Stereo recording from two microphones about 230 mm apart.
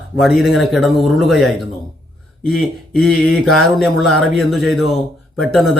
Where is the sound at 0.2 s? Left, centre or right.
Centre.